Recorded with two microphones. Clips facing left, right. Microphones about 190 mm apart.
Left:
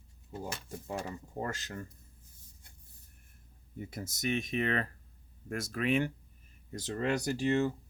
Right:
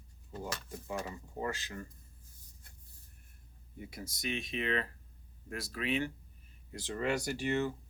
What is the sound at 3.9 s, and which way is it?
Speech, 50° left (ahead or behind).